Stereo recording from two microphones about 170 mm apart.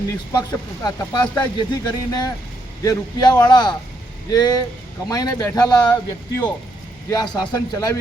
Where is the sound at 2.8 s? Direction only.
20° left (ahead or behind).